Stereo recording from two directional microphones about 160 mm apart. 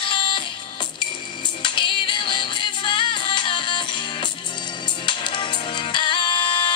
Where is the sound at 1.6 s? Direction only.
30° left (ahead or behind).